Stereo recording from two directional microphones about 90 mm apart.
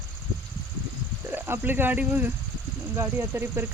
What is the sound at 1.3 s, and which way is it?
Speech, 25° right (ahead or behind).